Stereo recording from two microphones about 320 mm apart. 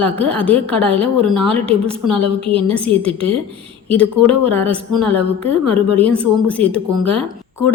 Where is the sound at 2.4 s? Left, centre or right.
Centre.